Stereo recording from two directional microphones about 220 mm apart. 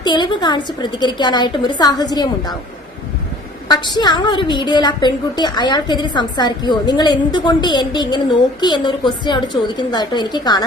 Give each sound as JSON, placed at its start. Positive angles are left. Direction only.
{"t": 0.0, "sound": "a woman's voice", "side_deg": 20}
{"t": 3.7, "sound": "a woman's voice", "side_deg": 20}